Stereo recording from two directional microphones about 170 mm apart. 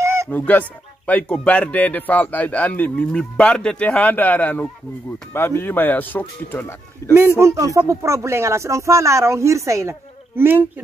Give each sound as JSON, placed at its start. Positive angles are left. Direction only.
{"t": 0.0, "sound": "a sound", "side_deg": -15}
{"t": 0.3, "sound": "speech", "side_deg": 10}
{"t": 7.2, "sound": "speech", "side_deg": -15}